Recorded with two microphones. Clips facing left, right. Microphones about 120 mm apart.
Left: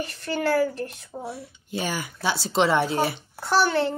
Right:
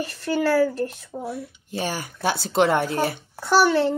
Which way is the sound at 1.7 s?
35° right (ahead or behind).